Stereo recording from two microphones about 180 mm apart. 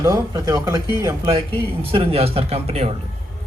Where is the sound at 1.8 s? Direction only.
30° right (ahead or behind).